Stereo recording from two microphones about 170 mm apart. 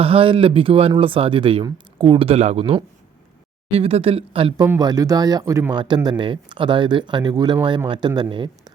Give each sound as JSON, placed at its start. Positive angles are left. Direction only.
{"t": 0.0, "sound": "speech", "side_deg": -35}
{"t": 4.6, "sound": "speech", "side_deg": -20}